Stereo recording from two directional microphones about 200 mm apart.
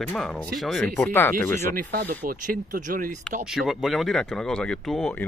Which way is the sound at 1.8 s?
45° right (ahead or behind).